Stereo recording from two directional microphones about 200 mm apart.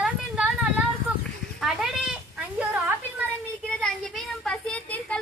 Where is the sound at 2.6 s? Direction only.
10° right (ahead or behind).